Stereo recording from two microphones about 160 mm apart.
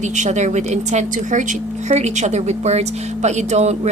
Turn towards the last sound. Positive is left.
turn(degrees=-45)  # may be behind; listen again after turning